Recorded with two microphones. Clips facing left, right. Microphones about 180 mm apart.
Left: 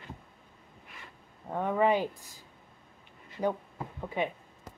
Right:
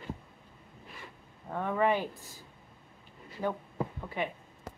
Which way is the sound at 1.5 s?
15° left (ahead or behind).